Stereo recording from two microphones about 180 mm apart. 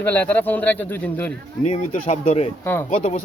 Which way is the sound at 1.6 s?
40° left (ahead or behind).